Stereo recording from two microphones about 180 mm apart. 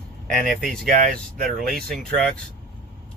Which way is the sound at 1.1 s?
55° right (ahead or behind).